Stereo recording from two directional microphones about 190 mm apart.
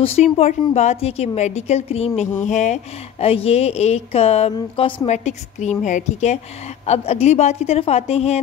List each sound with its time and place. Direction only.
0.0 s a woman's voice: 35° left (ahead or behind)